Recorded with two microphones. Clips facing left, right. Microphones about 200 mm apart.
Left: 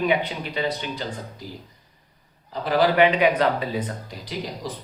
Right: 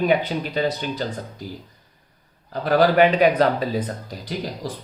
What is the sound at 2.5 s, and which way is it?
Speech, 45° right (ahead or behind).